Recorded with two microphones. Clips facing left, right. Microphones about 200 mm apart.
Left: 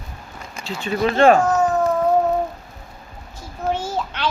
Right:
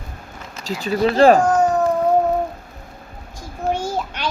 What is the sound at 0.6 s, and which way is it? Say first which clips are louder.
Speech: right 2 dB; 40° right (ahead or behind).